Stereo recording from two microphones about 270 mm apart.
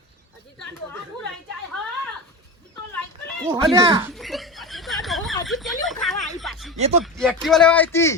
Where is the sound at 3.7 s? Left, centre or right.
Centre.